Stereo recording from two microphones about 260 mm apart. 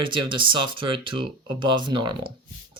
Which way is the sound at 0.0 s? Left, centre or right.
Centre.